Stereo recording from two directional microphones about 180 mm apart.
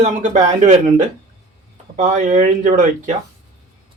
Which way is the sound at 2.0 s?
45° right (ahead or behind).